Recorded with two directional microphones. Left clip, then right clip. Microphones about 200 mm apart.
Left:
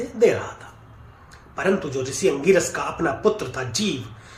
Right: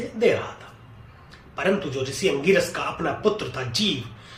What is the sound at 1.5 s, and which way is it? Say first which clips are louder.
Speech: left 1 dB; 20° left (ahead or behind).